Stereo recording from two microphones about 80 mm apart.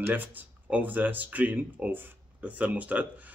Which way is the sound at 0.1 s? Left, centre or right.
Right.